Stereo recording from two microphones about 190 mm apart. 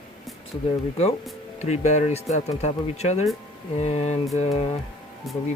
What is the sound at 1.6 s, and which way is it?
Speech, 35° left (ahead or behind).